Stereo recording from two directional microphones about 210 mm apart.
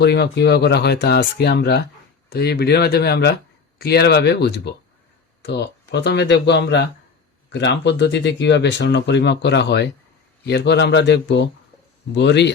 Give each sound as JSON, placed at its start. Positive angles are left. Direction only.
{"t": 0.0, "sound": "speech", "side_deg": 50}